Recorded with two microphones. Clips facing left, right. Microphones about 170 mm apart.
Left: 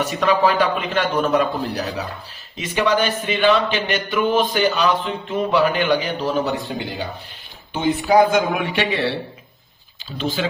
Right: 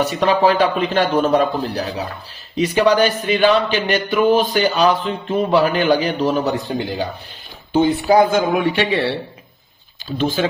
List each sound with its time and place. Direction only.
0.0 s a man's voice: 30° right (ahead or behind)
7.7 s a man's voice: 35° right (ahead or behind)
10.1 s speech: 45° right (ahead or behind)